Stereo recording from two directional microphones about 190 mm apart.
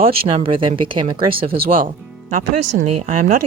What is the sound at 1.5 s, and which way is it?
Speech, 50° right (ahead or behind).